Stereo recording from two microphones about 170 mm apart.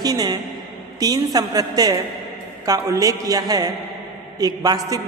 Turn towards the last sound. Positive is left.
turn(degrees=-20)  # may be behind; listen again after turning